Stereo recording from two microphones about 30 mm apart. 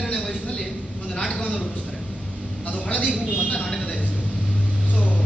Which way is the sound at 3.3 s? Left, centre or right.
Left.